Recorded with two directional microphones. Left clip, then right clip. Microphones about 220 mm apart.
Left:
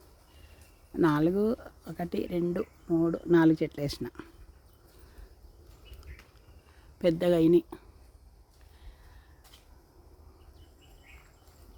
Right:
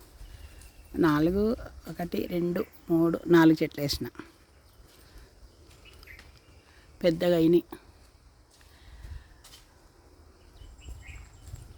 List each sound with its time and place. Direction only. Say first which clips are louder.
0.9 s speech: right 1 dB; centre (ahead or behind)
7.0 s speech: right 1 dB; centre (ahead or behind)